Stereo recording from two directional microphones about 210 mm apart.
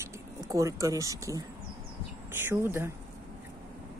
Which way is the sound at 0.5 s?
15° right (ahead or behind).